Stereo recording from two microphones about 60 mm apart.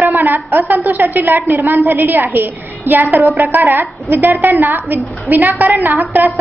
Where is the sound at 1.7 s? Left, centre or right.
Right.